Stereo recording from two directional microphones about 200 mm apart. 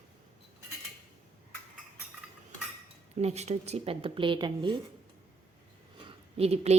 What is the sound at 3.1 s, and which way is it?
Speech, 35° right (ahead or behind).